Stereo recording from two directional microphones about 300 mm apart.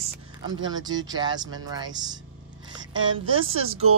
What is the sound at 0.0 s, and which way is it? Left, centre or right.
Speech, centre.